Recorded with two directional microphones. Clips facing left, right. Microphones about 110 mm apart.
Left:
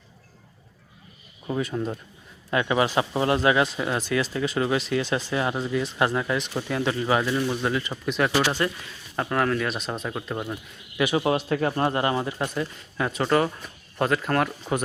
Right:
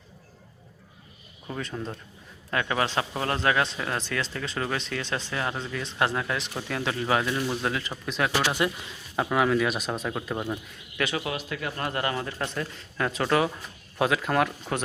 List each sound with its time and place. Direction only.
1.5 s speech: 10° left (ahead or behind)
10.9 s a man's voice: 15° left (ahead or behind)
11.2 s speech: 35° left (ahead or behind); by 12.5 s 15° left (ahead or behind)
12.5 s speech: 5° left (ahead or behind)